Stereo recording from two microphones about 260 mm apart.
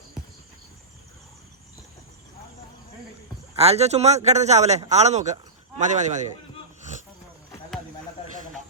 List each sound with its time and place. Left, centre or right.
3.5 s a man's voice: right